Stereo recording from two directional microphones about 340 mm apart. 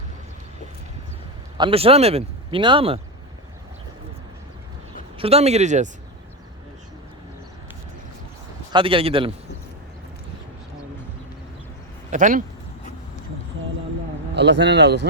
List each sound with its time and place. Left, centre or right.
1.5 s speech: centre
5.1 s speech: centre
8.7 s speech: centre
12.1 s speech: right
14.3 s speech: right